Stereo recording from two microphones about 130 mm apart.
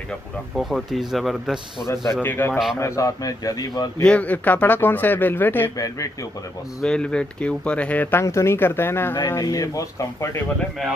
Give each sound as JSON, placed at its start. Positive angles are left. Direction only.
{"t": 0.6, "sound": "speech", "side_deg": 0}
{"t": 2.2, "sound": "speech", "side_deg": 15}
{"t": 4.0, "sound": "speech", "side_deg": 10}
{"t": 6.8, "sound": "speech", "side_deg": 5}